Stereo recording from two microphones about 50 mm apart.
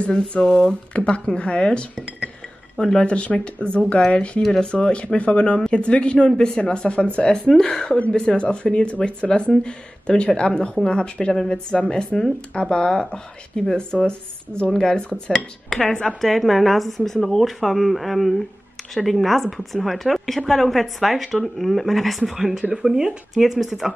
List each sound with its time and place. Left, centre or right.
0.3 s speech: centre
16.2 s a woman's voice: centre